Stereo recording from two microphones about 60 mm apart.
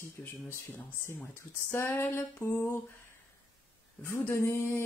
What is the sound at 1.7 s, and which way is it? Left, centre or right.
Female singing, left.